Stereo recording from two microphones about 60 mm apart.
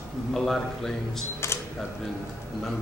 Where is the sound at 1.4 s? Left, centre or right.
Left.